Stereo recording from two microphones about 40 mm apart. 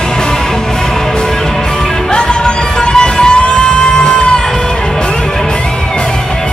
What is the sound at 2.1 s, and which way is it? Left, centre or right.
Music, left.